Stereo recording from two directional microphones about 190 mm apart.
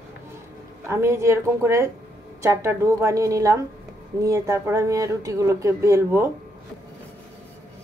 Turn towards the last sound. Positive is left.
turn(degrees=-15)  # may be behind; listen again after turning